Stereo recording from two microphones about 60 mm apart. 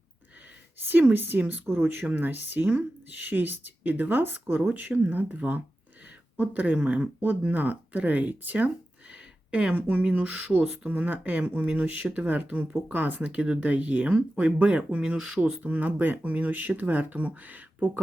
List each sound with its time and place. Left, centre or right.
0.8 s speech: right
4.7 s speech: right
9.1 s a sound: centre
9.8 s speech: right
15.6 s speech: right